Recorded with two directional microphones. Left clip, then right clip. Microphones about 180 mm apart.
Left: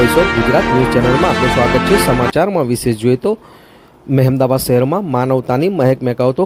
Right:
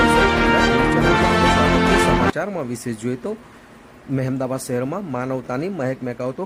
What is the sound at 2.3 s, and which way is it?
Speech, 40° left (ahead or behind).